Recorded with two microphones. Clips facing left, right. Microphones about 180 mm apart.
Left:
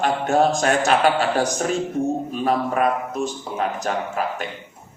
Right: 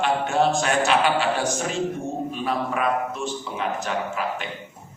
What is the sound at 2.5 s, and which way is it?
A man's voice, 40° left (ahead or behind).